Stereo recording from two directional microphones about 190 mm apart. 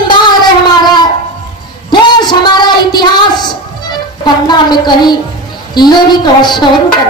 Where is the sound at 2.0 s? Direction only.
25° left (ahead or behind).